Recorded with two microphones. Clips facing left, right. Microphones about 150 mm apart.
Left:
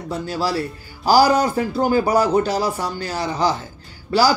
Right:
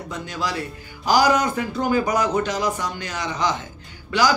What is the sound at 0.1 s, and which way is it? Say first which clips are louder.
Speech: left 6 dB; 35° left (ahead or behind).